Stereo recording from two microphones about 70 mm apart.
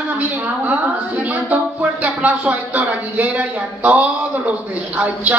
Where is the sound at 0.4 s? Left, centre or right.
Right.